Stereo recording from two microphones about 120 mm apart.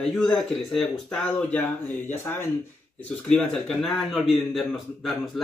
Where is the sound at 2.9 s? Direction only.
10° left (ahead or behind).